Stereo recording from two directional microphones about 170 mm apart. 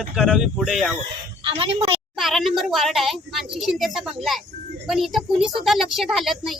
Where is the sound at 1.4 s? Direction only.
30° right (ahead or behind).